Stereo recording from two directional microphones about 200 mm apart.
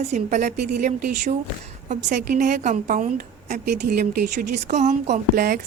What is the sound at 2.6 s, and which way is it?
Speech, 40° right (ahead or behind).